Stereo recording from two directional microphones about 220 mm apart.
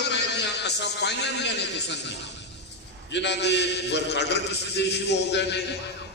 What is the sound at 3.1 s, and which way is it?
A man's voice, 50° left (ahead or behind).